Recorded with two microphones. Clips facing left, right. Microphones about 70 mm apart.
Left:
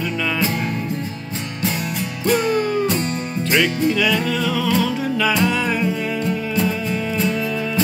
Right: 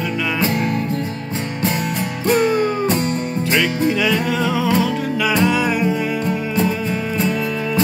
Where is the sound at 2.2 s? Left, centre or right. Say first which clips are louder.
Right 2 dB; right.